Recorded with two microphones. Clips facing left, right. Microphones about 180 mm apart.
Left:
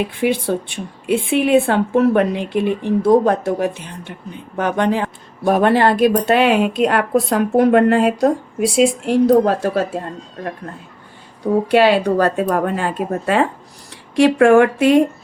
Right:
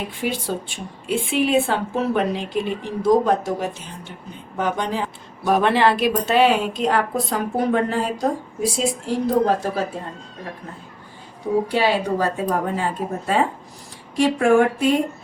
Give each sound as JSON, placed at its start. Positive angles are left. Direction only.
{"t": 1.0, "sound": "a woman's voice", "side_deg": 60}
{"t": 5.5, "sound": "a woman's voice", "side_deg": 45}
{"t": 11.7, "sound": "a woman's voice", "side_deg": 70}